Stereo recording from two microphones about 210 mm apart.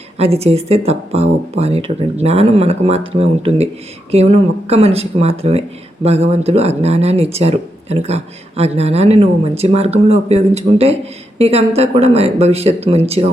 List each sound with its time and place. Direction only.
0.2 s speech: 30° right (ahead or behind)